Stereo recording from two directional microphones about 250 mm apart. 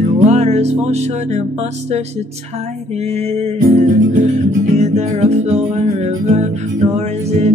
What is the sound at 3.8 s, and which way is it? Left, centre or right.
Music, right.